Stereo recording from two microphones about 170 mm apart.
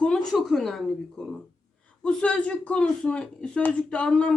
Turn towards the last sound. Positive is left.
turn(degrees=5)  # may be behind; listen again after turning